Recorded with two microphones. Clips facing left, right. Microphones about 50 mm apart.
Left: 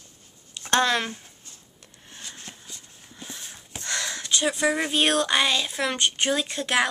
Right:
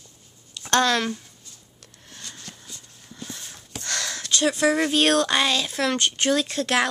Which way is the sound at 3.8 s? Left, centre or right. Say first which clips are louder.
Even; centre.